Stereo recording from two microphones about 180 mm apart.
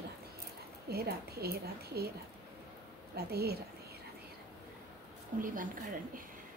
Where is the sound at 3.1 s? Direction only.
60° right (ahead or behind).